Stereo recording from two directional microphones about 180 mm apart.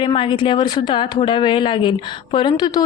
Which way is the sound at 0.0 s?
30° left (ahead or behind).